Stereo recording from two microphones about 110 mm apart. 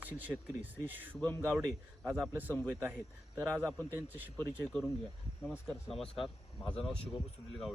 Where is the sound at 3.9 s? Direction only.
15° right (ahead or behind).